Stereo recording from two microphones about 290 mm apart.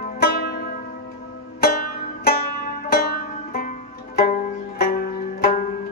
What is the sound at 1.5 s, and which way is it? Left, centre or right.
Banjo, left.